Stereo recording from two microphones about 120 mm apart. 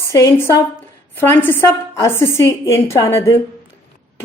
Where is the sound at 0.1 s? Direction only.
25° left (ahead or behind).